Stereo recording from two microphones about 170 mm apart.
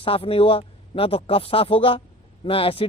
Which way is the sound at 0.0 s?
35° left (ahead or behind).